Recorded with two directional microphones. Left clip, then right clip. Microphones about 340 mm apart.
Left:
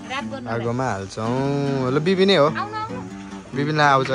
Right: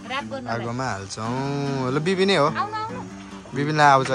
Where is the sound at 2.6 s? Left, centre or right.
Right.